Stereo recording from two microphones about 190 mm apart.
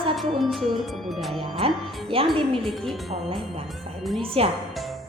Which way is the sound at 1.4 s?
25° right (ahead or behind).